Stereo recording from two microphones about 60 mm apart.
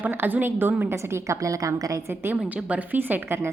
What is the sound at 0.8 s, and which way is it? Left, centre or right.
A woman's voice, right.